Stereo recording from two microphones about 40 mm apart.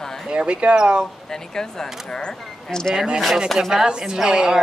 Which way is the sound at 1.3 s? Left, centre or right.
Centre.